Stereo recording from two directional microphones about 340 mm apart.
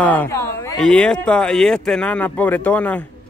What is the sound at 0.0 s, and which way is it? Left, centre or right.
Speech, centre.